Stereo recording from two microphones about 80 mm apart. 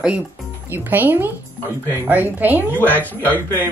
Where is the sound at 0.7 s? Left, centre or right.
Right.